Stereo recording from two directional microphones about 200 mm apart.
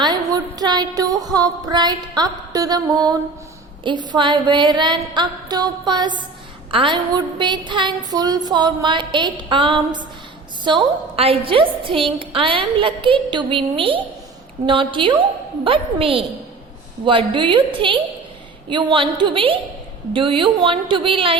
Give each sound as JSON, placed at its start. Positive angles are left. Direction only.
{"t": 0.0, "sound": "music", "side_deg": -20}
{"t": 3.8, "sound": "a woman's voice", "side_deg": -25}